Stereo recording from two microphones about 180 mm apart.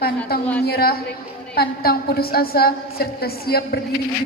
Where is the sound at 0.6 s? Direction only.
60° left (ahead or behind).